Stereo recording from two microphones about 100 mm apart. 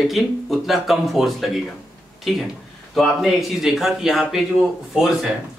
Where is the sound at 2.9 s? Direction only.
Centre (ahead or behind).